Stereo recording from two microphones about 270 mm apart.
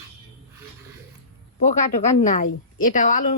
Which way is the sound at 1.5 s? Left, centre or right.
Left.